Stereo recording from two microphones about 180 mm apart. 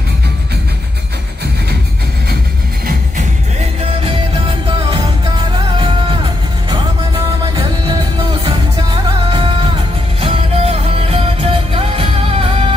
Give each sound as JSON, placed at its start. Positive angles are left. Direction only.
{"t": 9.3, "sound": "music", "side_deg": -30}